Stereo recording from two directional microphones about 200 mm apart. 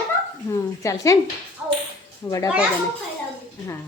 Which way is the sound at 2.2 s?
15° left (ahead or behind).